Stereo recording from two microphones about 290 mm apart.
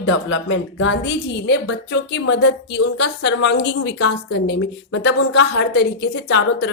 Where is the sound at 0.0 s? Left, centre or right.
Left.